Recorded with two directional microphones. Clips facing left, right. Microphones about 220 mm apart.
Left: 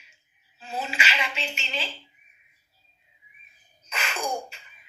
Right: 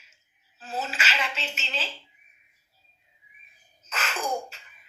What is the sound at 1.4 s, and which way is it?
Speech, 5° right (ahead or behind).